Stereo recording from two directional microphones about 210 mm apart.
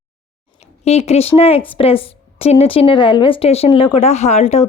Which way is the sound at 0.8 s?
30° left (ahead or behind).